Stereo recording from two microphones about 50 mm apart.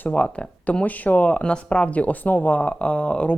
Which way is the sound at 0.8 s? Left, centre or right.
Left.